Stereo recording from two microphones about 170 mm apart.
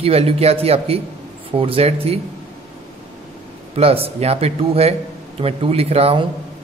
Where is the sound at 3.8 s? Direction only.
35° right (ahead or behind).